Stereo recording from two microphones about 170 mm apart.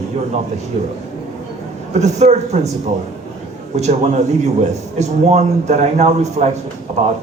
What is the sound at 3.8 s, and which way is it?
A man's voice, 40° right (ahead or behind).